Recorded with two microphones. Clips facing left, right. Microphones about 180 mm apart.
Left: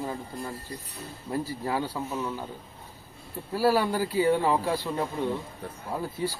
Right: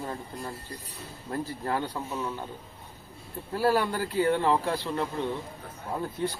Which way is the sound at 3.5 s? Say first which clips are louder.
Left 2 dB; 10° left (ahead or behind).